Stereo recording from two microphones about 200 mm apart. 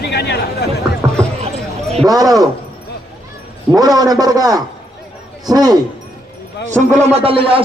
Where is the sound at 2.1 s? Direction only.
20° right (ahead or behind).